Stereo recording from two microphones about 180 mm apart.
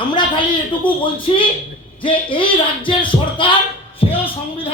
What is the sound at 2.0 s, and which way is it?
Speech, 30° left (ahead or behind).